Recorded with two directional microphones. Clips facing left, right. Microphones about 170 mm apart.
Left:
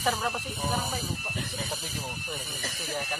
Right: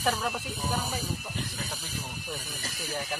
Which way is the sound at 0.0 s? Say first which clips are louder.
Even; centre (ahead or behind).